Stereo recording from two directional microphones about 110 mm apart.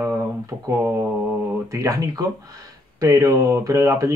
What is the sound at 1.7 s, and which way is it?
Speech, 30° right (ahead or behind).